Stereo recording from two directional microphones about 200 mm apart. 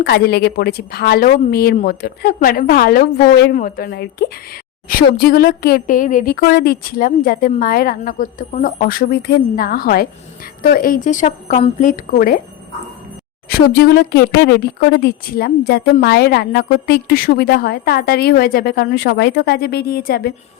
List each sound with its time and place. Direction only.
0.0 s a woman's voice: 50° left (ahead or behind)
13.5 s speech: 50° left (ahead or behind)